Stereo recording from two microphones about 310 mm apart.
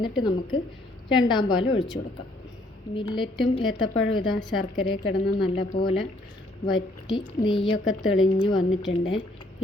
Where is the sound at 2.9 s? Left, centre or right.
Centre.